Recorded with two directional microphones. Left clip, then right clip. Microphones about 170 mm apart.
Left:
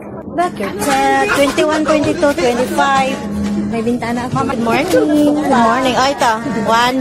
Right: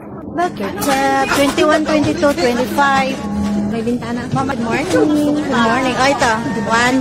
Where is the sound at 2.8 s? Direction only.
10° right (ahead or behind).